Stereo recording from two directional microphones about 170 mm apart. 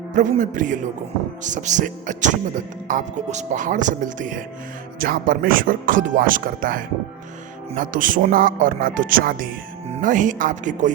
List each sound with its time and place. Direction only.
0.1 s speech: 45° right (ahead or behind)